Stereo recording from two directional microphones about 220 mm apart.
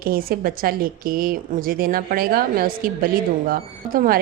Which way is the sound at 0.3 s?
40° right (ahead or behind).